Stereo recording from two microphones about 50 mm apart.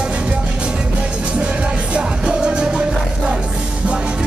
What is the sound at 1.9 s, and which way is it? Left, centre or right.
Music, centre.